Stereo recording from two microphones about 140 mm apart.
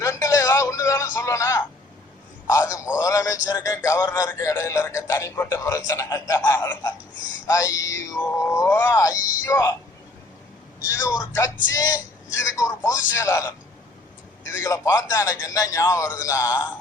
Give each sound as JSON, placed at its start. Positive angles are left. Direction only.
{"t": 0.0, "sound": "a sound", "side_deg": 20}
{"t": 2.5, "sound": "a man's voice", "side_deg": 20}
{"t": 10.8, "sound": "a man's voice", "side_deg": 20}